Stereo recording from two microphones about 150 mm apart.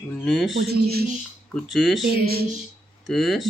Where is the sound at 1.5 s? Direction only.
Centre (ahead or behind).